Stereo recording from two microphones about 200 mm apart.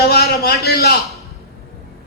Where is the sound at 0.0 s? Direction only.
50° left (ahead or behind).